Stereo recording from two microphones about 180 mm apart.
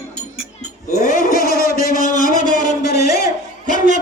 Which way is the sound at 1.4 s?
15° right (ahead or behind).